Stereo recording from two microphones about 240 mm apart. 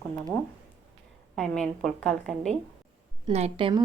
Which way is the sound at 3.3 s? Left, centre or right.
Right.